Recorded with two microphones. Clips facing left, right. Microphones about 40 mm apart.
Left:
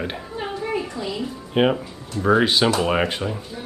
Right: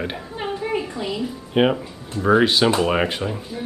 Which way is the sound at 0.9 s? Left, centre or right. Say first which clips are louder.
Right 1 dB; right.